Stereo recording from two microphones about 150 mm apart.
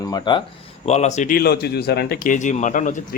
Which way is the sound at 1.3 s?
90° left.